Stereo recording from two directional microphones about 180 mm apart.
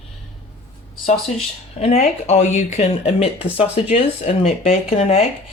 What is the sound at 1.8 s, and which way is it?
Speech, 35° left (ahead or behind).